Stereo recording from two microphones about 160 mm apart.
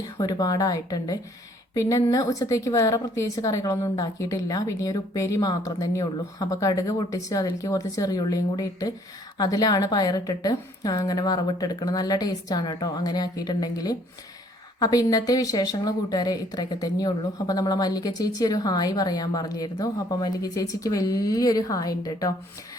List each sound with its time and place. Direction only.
0.2 s a woman's voice: 25° left (ahead or behind)